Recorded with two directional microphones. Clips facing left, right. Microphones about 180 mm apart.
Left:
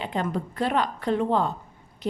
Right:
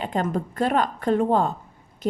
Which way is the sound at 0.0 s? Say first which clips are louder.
Right 3 dB; 45° right (ahead or behind).